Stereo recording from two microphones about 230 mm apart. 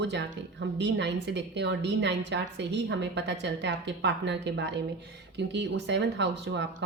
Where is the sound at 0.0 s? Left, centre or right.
Right.